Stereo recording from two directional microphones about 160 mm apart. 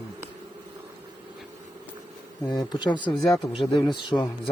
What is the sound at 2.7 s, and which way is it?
Speech, 30° left (ahead or behind).